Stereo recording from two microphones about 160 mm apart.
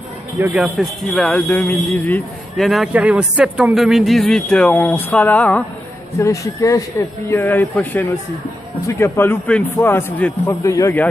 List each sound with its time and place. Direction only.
0.4 s speech: 5° right (ahead or behind)
1.1 s speech: 5° left (ahead or behind)
2.5 s speech: centre (ahead or behind)
6.1 s a man's voice: 20° left (ahead or behind)